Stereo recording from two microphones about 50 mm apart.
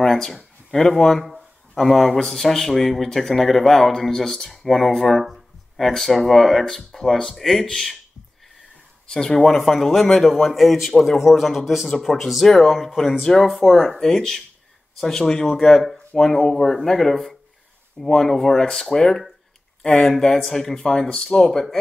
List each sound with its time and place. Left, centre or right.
0.0 s speech: centre
9.0 s speech: centre